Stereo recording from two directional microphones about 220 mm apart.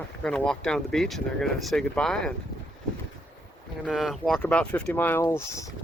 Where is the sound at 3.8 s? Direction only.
Centre (ahead or behind).